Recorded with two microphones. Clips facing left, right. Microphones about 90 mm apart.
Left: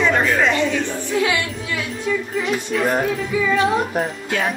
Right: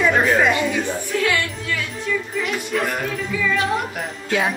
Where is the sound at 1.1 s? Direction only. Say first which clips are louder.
Left 2 dB; 15° left (ahead or behind).